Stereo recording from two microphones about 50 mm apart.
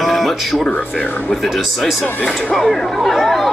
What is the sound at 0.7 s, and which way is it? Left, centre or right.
Speech, centre.